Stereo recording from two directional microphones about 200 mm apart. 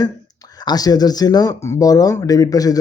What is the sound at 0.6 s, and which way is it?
A man's voice, 20° left (ahead or behind).